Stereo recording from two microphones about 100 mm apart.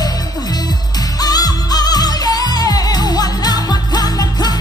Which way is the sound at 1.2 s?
40° left (ahead or behind).